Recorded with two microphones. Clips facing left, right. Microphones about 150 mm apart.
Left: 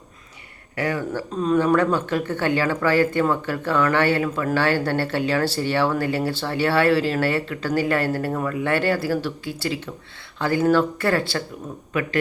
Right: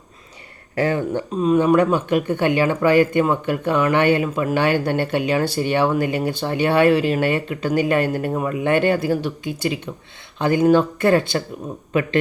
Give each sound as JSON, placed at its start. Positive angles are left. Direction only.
{"t": 0.8, "sound": "speech", "side_deg": -25}
{"t": 1.4, "sound": "speech", "side_deg": -10}